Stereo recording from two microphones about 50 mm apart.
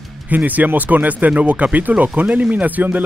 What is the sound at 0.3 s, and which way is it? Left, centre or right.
Speech, right.